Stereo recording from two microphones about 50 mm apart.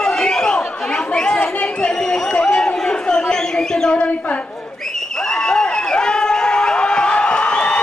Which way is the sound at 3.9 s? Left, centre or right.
Left.